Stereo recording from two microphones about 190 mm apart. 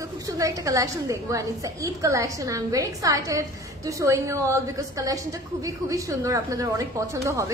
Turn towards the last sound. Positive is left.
turn(degrees=-15)  # may be behind; listen again after turning